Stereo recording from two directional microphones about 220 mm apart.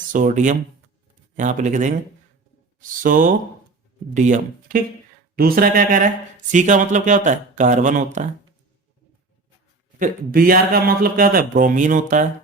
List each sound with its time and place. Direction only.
0.1 s speech: 35° right (ahead or behind)
3.0 s speech: 35° right (ahead or behind)
10.0 s speech: 40° right (ahead or behind)